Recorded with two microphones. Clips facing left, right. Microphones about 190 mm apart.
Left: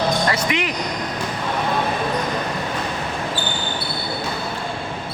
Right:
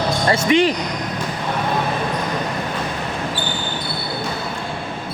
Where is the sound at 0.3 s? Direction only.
30° right (ahead or behind).